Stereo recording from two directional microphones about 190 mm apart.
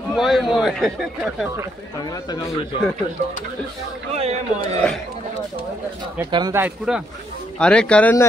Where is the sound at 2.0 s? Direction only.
20° left (ahead or behind).